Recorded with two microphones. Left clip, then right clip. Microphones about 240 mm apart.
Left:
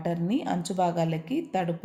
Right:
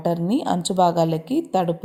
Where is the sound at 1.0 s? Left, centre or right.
Centre.